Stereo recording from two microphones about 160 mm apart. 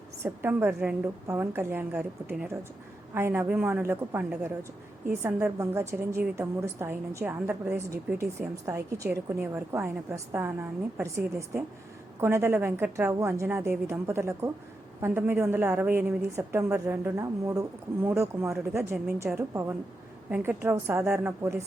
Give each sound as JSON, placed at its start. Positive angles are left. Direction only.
{"t": 0.2, "sound": "speech", "side_deg": -15}
{"t": 7.9, "sound": "speech", "side_deg": -20}